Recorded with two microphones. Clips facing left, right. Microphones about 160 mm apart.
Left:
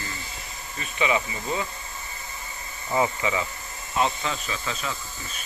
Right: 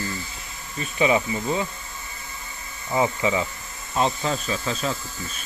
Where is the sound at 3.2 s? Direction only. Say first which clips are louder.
Right 3 dB; 25° right (ahead or behind).